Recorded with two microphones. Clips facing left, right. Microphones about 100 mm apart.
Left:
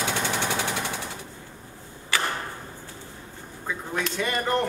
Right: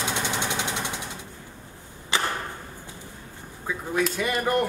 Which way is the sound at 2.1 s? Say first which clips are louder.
Right 1 dB; 20° right (ahead or behind).